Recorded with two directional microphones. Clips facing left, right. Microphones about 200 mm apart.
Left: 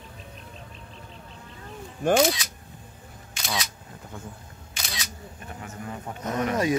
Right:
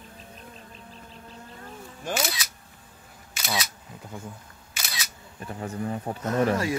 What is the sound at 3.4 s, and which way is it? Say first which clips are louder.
Single-lens reflex camera: right 1 dB; 5° right (ahead or behind).